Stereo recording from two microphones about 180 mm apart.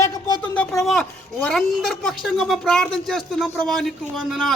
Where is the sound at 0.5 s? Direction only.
Centre (ahead or behind).